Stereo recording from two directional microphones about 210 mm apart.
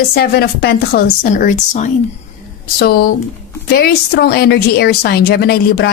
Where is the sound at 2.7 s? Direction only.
50° left (ahead or behind).